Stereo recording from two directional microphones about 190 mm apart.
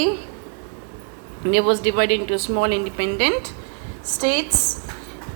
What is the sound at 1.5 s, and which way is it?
Speech, 60° right (ahead or behind).